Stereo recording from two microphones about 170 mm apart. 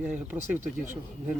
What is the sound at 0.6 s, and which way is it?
Speech, 45° right (ahead or behind).